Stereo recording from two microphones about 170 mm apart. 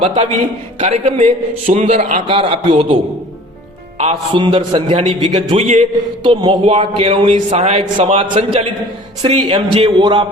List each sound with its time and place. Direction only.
0.8 s a man's voice: 40° right (ahead or behind)
2.2 s a man's voice: 30° right (ahead or behind)